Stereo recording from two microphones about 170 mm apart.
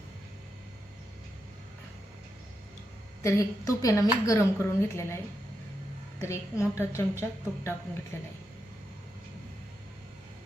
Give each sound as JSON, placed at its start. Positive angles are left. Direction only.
{"t": 3.2, "sound": "a woman's voice", "side_deg": 20}